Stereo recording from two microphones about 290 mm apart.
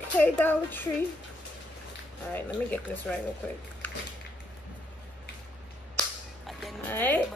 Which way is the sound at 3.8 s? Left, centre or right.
Centre.